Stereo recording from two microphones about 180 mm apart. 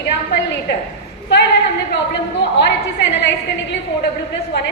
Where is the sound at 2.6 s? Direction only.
75° left (ahead or behind).